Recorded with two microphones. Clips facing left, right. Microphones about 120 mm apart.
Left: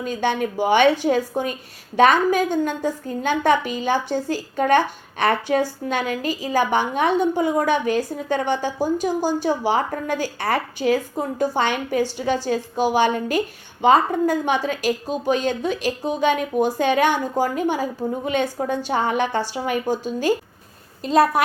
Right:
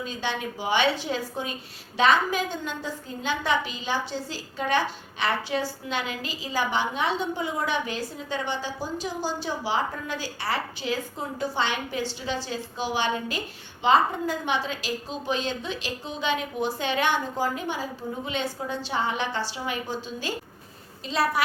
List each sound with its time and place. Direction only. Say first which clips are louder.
0.0 s a woman's voice: left 8 dB; 55° left (ahead or behind)